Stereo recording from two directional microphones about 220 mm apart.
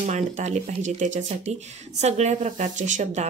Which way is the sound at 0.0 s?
35° right (ahead or behind).